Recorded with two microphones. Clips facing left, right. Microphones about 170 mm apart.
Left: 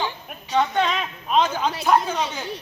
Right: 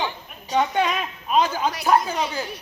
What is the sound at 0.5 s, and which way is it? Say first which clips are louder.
A man's voice: even; 10° right (ahead or behind).